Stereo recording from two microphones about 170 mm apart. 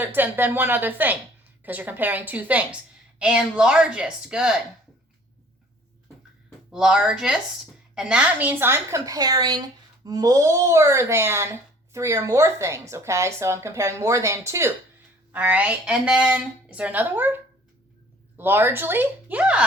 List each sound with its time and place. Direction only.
0.0 s a woman's voice: 10° right (ahead or behind)
6.7 s a woman's voice: 5° right (ahead or behind)